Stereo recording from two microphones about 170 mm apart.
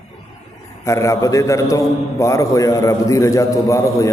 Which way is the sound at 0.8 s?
20° left (ahead or behind).